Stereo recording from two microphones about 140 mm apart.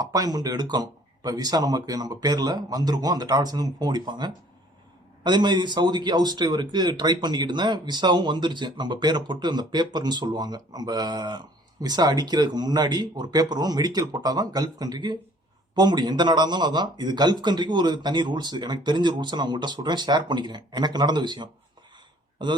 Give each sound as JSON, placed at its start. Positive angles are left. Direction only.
{"t": 0.0, "sound": "speech", "side_deg": -25}